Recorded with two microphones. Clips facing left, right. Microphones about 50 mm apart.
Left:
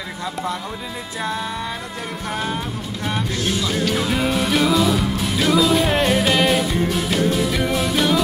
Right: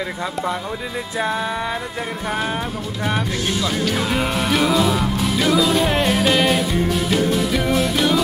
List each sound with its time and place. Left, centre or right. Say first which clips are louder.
1.1 s music: right 3 dB; right
3.6 s speech: even; centre
7.1 s music: right 1 dB; centre